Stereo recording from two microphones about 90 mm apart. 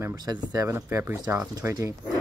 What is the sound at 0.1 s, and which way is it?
Speech, 50° right (ahead or behind).